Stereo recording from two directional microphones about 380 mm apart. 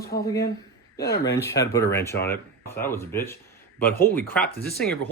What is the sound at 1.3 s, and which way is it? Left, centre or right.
Speech, centre.